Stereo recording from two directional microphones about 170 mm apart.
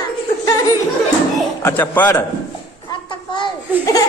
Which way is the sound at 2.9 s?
25° left (ahead or behind).